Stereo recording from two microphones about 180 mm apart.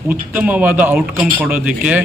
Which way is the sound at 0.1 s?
10° right (ahead or behind).